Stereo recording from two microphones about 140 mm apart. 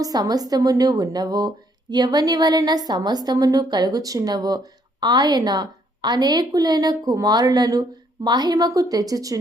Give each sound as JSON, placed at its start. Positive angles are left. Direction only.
{"t": 0.0, "sound": "speech", "side_deg": -25}